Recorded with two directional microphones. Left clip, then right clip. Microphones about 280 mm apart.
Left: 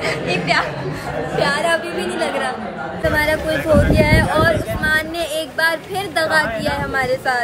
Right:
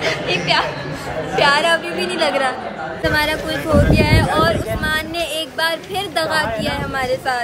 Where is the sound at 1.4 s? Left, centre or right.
Centre.